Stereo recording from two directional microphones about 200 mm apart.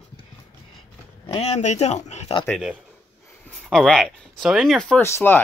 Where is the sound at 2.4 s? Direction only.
Centre (ahead or behind).